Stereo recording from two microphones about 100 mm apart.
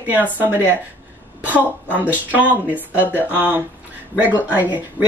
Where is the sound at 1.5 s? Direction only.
15° right (ahead or behind).